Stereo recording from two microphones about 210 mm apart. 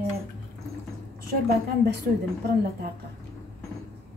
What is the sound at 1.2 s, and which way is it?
Speech, 50° right (ahead or behind).